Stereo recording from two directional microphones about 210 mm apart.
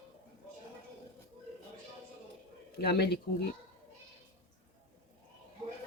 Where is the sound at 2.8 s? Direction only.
50° left (ahead or behind).